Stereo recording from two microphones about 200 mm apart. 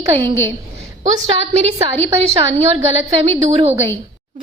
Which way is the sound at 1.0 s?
30° right (ahead or behind).